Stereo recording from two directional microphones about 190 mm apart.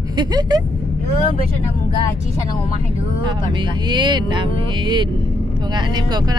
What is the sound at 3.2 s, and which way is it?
Speech, 25° right (ahead or behind).